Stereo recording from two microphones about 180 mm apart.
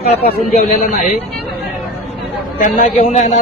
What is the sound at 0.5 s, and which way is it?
Speech, 40° left (ahead or behind).